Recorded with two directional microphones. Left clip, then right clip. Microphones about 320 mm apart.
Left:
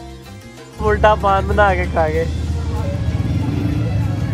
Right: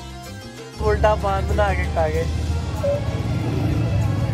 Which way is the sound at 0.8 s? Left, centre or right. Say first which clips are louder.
Left 5 dB; centre.